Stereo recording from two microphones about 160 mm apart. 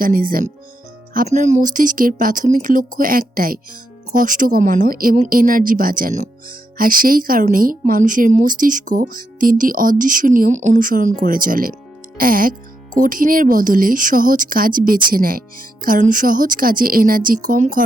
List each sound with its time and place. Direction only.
0.0 s speech: 60° right (ahead or behind)
1.3 s speech: 45° right (ahead or behind)